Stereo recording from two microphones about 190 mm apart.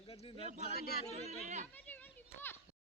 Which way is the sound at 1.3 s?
40° right (ahead or behind).